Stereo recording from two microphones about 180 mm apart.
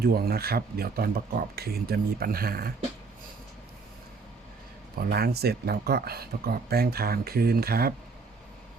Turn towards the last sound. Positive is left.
turn(degrees=-60)  # may be behind; listen again after turning